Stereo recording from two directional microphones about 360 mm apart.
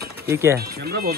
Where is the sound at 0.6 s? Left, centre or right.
Right.